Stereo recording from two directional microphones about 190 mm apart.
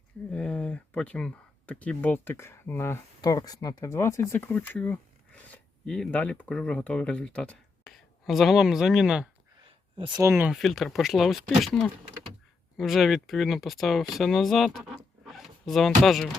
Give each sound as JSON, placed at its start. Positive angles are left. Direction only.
{"t": 0.3, "sound": "speech", "side_deg": 5}
{"t": 9.6, "sound": "a sound", "side_deg": -25}
{"t": 10.5, "sound": "speech", "side_deg": 0}